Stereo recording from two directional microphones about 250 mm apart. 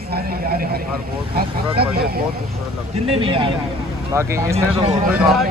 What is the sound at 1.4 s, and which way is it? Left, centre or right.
Speech, right.